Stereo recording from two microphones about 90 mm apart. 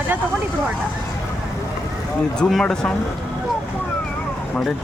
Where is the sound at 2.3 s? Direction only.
10° left (ahead or behind).